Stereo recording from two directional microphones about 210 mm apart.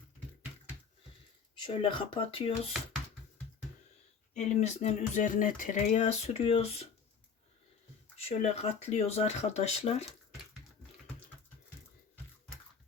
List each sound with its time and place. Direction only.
1.6 s speech: 25° left (ahead or behind)
4.4 s speech: 35° left (ahead or behind)
8.1 s speech: 30° left (ahead or behind)